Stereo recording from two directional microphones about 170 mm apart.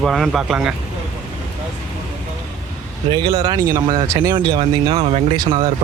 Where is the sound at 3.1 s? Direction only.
25° right (ahead or behind).